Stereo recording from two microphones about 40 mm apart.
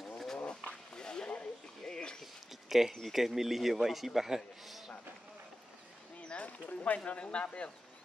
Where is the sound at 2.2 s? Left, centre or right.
Centre.